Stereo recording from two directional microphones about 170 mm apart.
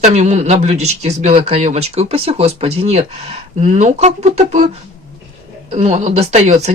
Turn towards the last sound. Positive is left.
turn(degrees=-40)  # may be behind; listen again after turning